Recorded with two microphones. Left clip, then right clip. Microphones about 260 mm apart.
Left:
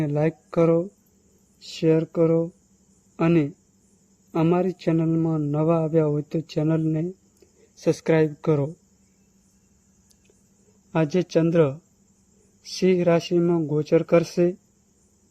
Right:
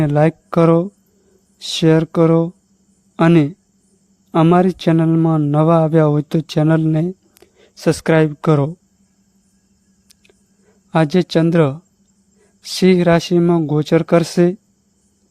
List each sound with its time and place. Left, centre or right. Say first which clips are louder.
0.0 s a man's voice: right 9 dB; right
10.9 s a man's voice: right 7 dB; right